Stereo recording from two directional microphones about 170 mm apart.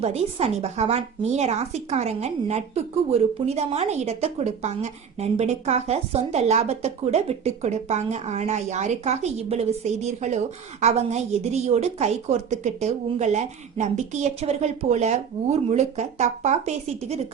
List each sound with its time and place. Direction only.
0.0 s speech: 35° right (ahead or behind)